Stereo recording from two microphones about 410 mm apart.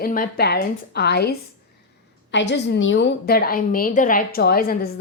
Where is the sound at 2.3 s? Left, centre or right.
Left.